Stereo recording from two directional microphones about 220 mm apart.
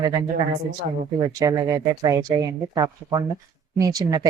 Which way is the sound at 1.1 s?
15° right (ahead or behind).